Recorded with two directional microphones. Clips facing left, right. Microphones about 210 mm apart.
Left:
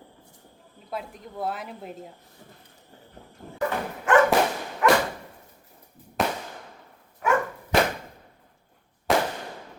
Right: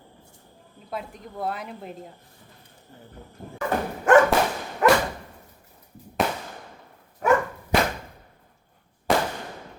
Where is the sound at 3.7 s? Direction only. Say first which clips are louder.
Right 5 dB; 45° right (ahead or behind).